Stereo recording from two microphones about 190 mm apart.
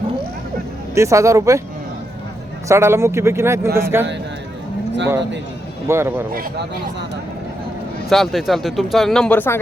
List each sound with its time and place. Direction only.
0.9 s speech: 15° right (ahead or behind)
2.6 s speech: 15° right (ahead or behind)
5.9 s speech: 15° right (ahead or behind)
8.1 s speech: centre (ahead or behind)